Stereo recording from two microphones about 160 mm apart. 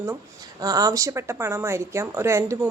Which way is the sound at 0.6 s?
20° right (ahead or behind).